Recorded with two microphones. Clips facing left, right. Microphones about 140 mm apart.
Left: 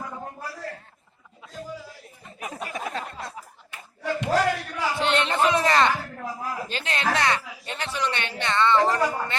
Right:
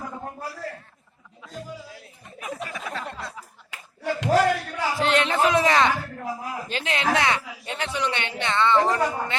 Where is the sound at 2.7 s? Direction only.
45° left (ahead or behind).